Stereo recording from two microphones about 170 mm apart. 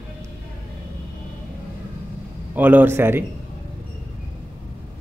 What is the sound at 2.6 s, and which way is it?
Speech, 10° right (ahead or behind).